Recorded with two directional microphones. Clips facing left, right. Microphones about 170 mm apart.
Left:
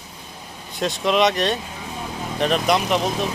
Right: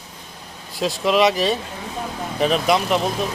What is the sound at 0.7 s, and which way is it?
Speech, centre (ahead or behind).